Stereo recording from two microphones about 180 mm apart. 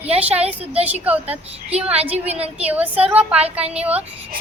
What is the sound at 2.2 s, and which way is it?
Speech, 35° right (ahead or behind).